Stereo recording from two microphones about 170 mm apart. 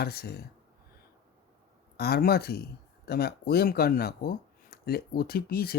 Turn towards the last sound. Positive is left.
turn(degrees=65)  # may be behind; listen again after turning